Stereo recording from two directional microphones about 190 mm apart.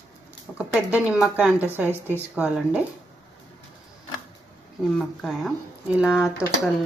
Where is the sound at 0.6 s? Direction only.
5° right (ahead or behind).